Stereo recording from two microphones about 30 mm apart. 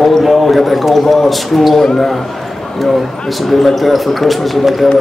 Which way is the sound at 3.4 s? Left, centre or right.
Centre.